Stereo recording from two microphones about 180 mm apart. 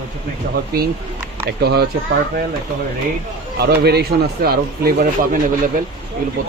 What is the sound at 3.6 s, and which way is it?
Speech, 60° right (ahead or behind).